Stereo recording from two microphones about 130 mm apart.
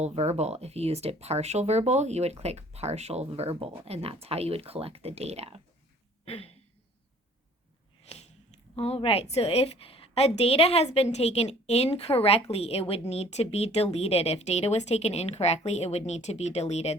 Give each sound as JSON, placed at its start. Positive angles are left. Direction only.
{"t": 0.0, "sound": "speech", "side_deg": -55}
{"t": 6.2, "sound": "a sound", "side_deg": 50}
{"t": 8.1, "sound": "a woman's voice", "side_deg": 55}